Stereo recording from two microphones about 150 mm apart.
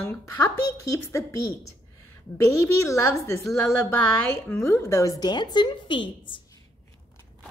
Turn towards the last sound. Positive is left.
turn(degrees=35)  # may be behind; listen again after turning